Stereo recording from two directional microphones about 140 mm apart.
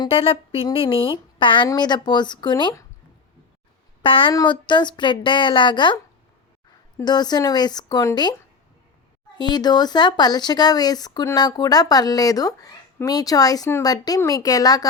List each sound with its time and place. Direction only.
0.0 s speech: 45° left (ahead or behind)
4.0 s speech: 40° left (ahead or behind)
7.0 s speech: 30° left (ahead or behind)
9.4 s speech: 30° left (ahead or behind)